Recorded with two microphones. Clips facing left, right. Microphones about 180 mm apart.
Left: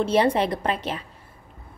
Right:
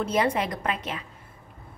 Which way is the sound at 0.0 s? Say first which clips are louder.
Left 5 dB; 30° left (ahead or behind).